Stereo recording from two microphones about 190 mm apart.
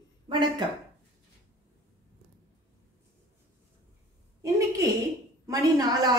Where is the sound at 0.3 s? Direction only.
25° right (ahead or behind).